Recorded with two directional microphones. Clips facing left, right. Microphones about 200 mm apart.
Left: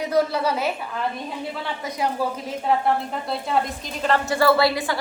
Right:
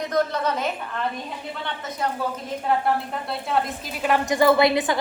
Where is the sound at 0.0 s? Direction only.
10° left (ahead or behind).